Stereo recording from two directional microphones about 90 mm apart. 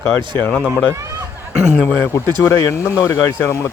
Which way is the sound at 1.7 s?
20° left (ahead or behind).